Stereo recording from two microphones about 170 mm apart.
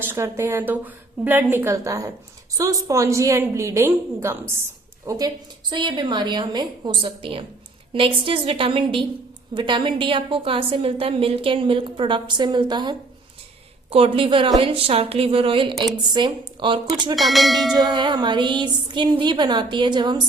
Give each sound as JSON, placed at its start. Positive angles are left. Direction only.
{"t": 0.0, "sound": "a woman's voice", "side_deg": -15}
{"t": 17.2, "sound": "bell", "side_deg": 0}
{"t": 17.7, "sound": "a woman's voice", "side_deg": -25}